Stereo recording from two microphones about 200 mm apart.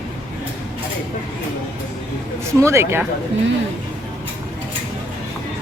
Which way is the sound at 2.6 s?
15° right (ahead or behind).